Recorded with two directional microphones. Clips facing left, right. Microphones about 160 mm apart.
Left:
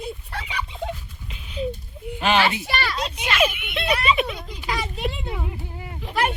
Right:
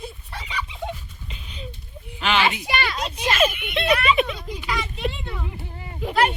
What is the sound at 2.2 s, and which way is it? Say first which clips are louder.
Speech: left 2 dB; 40° left (ahead or behind).